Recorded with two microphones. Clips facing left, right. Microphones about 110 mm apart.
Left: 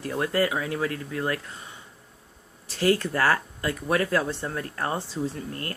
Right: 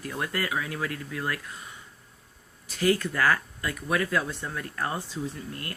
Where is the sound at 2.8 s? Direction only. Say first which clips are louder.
Left 2 dB; 35° left (ahead or behind).